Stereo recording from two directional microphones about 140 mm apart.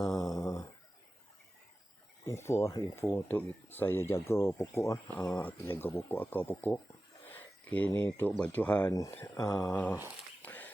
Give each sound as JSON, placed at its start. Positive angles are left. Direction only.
{"t": 0.0, "sound": "a sound", "side_deg": 25}
{"t": 2.2, "sound": "speech", "side_deg": 20}
{"t": 5.4, "sound": "speech", "side_deg": 15}
{"t": 7.3, "sound": "a sound", "side_deg": 10}
{"t": 7.9, "sound": "speech", "side_deg": 20}
{"t": 8.9, "sound": "speech", "side_deg": 20}
{"t": 10.4, "sound": "walk", "side_deg": 15}